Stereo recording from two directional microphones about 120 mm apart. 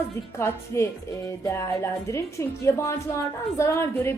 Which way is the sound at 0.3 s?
20° left (ahead or behind).